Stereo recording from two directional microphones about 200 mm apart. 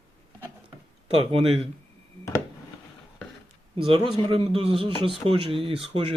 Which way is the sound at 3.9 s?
25° right (ahead or behind).